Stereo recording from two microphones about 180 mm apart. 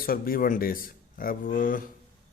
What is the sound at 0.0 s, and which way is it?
A man's voice, 55° left (ahead or behind).